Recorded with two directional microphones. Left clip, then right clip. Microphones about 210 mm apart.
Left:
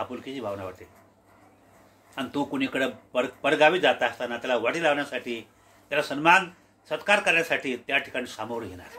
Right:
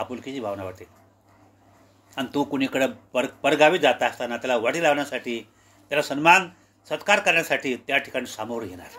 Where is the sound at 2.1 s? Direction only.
25° right (ahead or behind).